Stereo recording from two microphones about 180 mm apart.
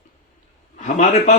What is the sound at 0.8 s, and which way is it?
Speech, 45° left (ahead or behind).